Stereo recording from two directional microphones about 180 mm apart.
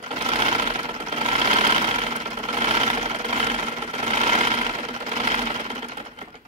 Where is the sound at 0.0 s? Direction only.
30° right (ahead or behind).